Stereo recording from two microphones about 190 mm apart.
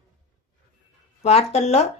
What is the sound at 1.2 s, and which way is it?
Speech, 35° left (ahead or behind).